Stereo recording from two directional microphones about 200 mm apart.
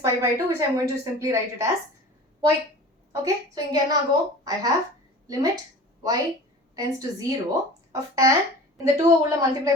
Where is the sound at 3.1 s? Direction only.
20° right (ahead or behind).